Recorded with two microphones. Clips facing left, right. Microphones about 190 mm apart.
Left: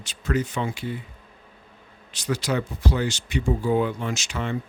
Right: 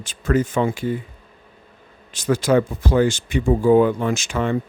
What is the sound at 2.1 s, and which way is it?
Speech, 50° right (ahead or behind).